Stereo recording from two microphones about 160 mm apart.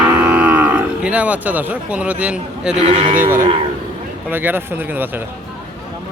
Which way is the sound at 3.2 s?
15° right (ahead or behind).